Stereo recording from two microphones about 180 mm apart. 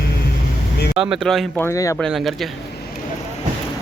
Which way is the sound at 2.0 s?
Centre (ahead or behind).